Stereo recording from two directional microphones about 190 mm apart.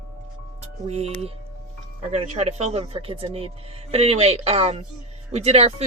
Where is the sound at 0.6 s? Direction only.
35° right (ahead or behind).